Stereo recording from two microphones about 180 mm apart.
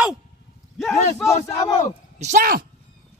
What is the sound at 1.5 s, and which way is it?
Speech, 20° left (ahead or behind).